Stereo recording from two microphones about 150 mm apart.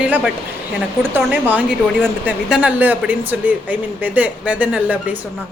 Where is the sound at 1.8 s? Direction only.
Centre (ahead or behind).